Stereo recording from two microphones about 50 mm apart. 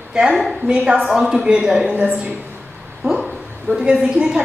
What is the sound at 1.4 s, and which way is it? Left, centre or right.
Speech, centre.